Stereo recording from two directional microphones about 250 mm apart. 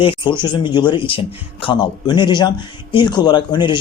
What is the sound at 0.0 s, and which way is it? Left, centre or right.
A man's voice, centre.